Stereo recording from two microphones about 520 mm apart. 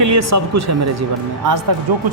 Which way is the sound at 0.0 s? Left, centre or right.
Right.